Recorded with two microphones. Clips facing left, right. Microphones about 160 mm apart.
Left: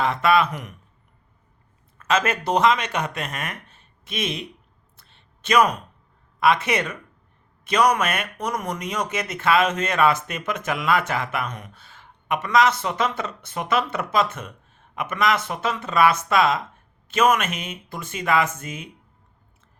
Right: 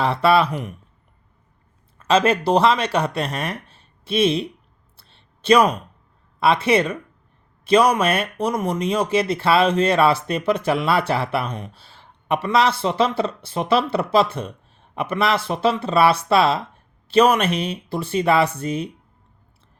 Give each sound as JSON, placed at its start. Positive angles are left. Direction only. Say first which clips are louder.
{"t": 0.0, "sound": "speech", "louder": "right 3 dB", "side_deg": -30}
{"t": 2.0, "sound": "speech", "louder": "right 5 dB", "side_deg": -30}
{"t": 4.9, "sound": "a sound", "louder": "right 3 dB", "side_deg": -30}
{"t": 6.4, "sound": "speech", "louder": "right 3 dB", "side_deg": -30}